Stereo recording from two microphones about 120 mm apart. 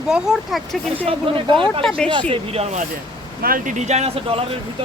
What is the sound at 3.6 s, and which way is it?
Speech, 85° right.